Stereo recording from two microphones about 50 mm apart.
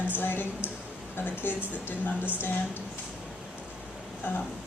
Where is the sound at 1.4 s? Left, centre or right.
Left.